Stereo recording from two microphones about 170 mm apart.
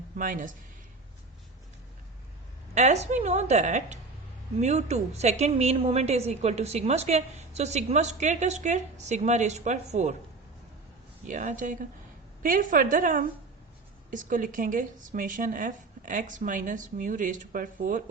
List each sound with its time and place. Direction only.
0.2 s speech: 50° right (ahead or behind)
2.7 s a woman's voice: 45° right (ahead or behind)
11.3 s speech: 45° right (ahead or behind)